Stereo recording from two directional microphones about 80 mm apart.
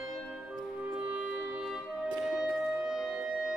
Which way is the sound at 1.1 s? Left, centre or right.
Centre.